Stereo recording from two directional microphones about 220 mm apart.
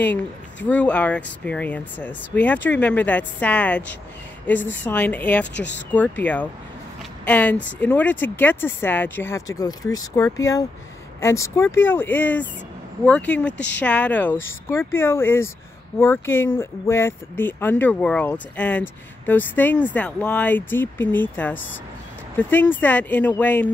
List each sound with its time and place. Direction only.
0.7 s speech: 5° left (ahead or behind)
4.8 s speech: 10° left (ahead or behind)
5.5 s speech: 55° left (ahead or behind)
5.9 s speech: 5° left (ahead or behind)